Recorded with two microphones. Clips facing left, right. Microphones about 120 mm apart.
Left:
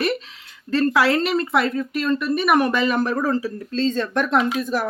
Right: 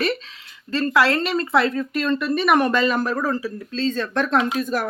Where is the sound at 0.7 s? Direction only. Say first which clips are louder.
Left 4 dB; 10° right (ahead or behind).